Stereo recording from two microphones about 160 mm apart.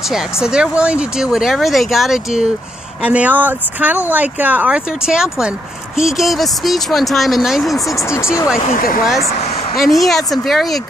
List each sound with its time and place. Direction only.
0.1 s speech: 5° right (ahead or behind)
7.9 s speech: 15° left (ahead or behind)
9.8 s speech: centre (ahead or behind)